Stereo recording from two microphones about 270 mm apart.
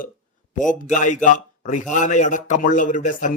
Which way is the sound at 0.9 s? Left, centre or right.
Left.